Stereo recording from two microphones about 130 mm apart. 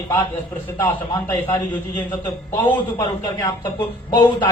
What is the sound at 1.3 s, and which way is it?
A man's voice, 25° left (ahead or behind).